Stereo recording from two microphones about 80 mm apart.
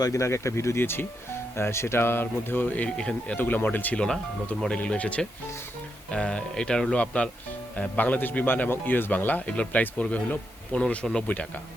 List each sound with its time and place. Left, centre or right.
0.0 s a man's voice: left; by 3.3 s centre
3.3 s a man's voice: left
4.0 s a man's voice: centre